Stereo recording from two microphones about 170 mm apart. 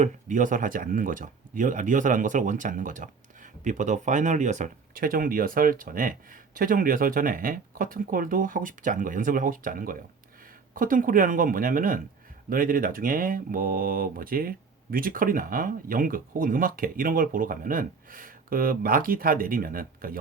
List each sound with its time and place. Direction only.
0.0 s speech: 50° right (ahead or behind)